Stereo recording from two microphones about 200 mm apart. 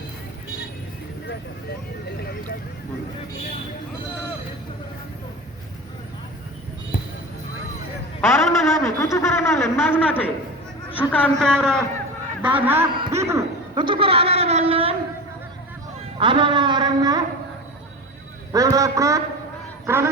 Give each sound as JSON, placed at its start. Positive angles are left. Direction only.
{"t": 6.9, "sound": "basketball bounce", "side_deg": 40}
{"t": 8.2, "sound": "a man's voice", "side_deg": 15}
{"t": 12.4, "sound": "speech", "side_deg": -10}
{"t": 13.8, "sound": "speech", "side_deg": -25}
{"t": 16.1, "sound": "speech", "side_deg": -25}
{"t": 18.5, "sound": "speech", "side_deg": -15}